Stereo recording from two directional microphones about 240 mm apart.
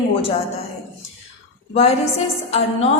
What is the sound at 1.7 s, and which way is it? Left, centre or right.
Speech, left.